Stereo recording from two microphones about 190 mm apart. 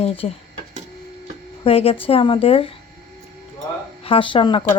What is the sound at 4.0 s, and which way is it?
Speech, 30° left (ahead or behind).